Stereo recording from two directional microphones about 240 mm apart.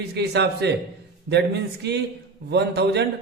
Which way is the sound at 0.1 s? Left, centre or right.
Right.